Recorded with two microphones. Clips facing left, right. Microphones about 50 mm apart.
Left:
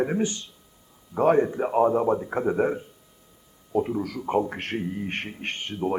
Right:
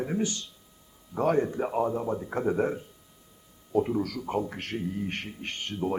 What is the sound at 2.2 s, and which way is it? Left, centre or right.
Speech, centre.